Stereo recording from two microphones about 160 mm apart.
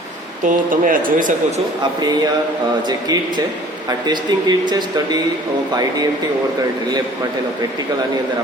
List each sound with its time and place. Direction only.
0.4 s speech: 55° right (ahead or behind)
2.8 s speech: 25° right (ahead or behind)